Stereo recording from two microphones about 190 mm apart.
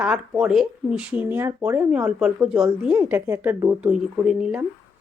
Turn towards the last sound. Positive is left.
turn(degrees=-5)  # may be behind; listen again after turning